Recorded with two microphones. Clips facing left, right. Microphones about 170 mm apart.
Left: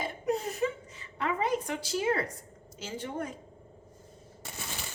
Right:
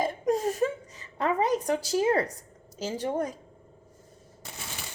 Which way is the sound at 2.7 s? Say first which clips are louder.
Right 7 dB; 40° right (ahead or behind).